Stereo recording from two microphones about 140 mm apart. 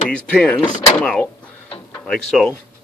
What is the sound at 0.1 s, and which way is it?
Speech, 10° left (ahead or behind).